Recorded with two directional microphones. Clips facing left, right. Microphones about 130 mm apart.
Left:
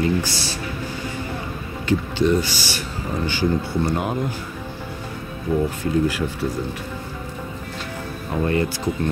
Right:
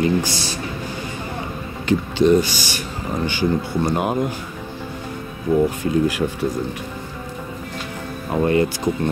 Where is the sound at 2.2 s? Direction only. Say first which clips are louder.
Right 6 dB; 15° right (ahead or behind).